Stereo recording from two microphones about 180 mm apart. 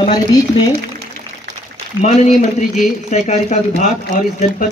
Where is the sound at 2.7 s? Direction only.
40° left (ahead or behind).